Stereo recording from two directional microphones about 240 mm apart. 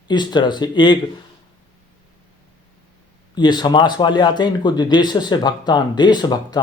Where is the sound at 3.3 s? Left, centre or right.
Centre.